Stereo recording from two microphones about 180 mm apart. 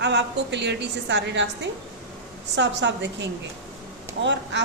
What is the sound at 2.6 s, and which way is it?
A woman's voice, 80° right.